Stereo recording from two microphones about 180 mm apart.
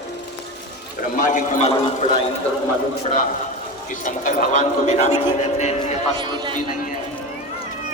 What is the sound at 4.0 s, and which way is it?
A man's voice, 45° left (ahead or behind).